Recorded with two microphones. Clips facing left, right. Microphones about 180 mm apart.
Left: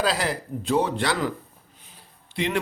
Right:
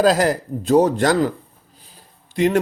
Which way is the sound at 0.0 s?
45° right (ahead or behind).